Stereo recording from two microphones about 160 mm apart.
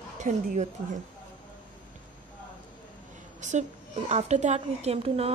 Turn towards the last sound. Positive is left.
turn(degrees=-35)  # may be behind; listen again after turning